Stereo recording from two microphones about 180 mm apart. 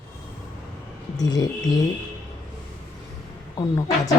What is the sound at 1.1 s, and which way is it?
Speech, 20° left (ahead or behind).